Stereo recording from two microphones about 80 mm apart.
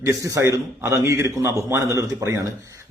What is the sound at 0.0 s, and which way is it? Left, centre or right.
A man's voice, right.